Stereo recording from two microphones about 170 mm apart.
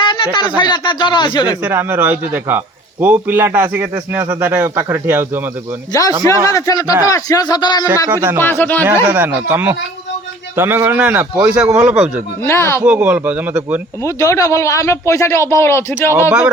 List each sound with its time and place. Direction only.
0.0 s a sound: 30° left (ahead or behind)
0.3 s a man's voice: 25° left (ahead or behind)
1.6 s a man's voice: 10° right (ahead or behind)
5.9 s a man's voice: 20° left (ahead or behind)
8.1 s a man's voice: 15° right (ahead or behind)
8.4 s speech: 10° left (ahead or behind)
8.8 s a man's voice: 10° right (ahead or behind)
12.4 s speech: 15° left (ahead or behind)
12.8 s a man's voice: 10° right (ahead or behind)
14.0 s speech: 20° left (ahead or behind)